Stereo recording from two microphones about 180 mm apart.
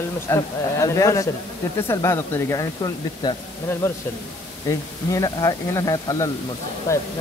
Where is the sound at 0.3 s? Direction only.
15° left (ahead or behind).